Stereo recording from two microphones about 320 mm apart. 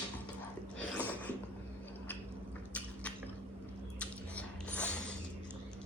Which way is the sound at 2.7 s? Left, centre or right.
Centre.